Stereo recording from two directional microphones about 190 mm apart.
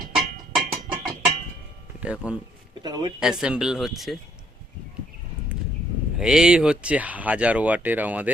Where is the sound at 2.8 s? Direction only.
20° right (ahead or behind).